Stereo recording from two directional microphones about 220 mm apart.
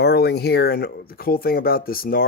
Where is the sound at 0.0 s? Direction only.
45° left (ahead or behind).